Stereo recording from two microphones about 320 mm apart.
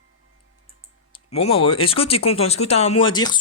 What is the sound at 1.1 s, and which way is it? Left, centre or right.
Speech, centre.